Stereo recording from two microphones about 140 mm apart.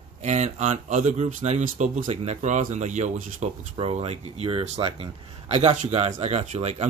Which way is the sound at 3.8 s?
45° right (ahead or behind).